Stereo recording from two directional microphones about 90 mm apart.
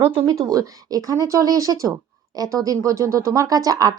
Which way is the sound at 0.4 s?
40° right (ahead or behind).